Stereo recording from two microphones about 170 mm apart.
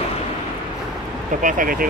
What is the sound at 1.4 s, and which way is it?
Speech, 50° right (ahead or behind).